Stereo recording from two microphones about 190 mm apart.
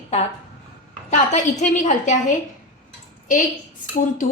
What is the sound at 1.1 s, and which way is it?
A woman's voice, 40° left (ahead or behind).